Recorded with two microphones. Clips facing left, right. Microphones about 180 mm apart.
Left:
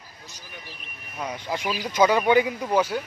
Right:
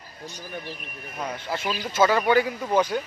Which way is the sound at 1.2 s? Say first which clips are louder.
Left 1 dB; 10° left (ahead or behind).